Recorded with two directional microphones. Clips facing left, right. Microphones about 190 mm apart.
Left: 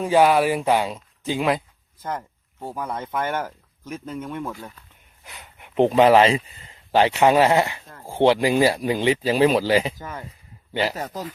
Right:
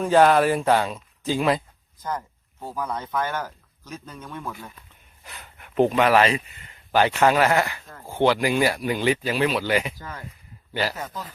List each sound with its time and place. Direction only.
0.0 s speech: 10° left (ahead or behind)
2.7 s speech: 25° left (ahead or behind)
10.9 s speech: 40° left (ahead or behind)